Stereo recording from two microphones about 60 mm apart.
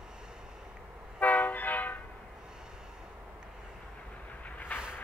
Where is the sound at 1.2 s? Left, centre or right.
Left.